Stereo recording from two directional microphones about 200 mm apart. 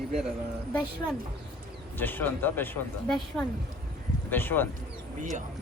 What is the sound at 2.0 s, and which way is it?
Speech, 10° left (ahead or behind).